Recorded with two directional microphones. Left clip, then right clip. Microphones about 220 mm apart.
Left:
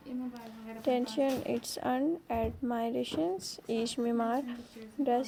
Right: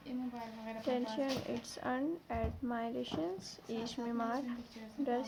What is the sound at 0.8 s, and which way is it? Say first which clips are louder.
A woman's voice: left 7 dB; 25° left (ahead or behind).